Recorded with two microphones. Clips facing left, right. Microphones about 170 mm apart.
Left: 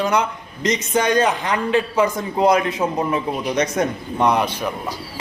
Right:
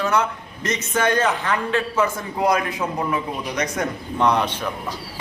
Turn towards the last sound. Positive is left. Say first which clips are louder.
# left 2 dB
turn(degrees=10)  # may be behind; listen again after turning